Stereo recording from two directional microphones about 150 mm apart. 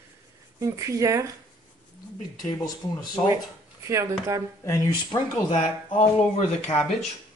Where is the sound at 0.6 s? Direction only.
20° right (ahead or behind).